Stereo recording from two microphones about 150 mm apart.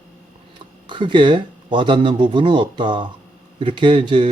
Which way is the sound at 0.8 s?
30° right (ahead or behind).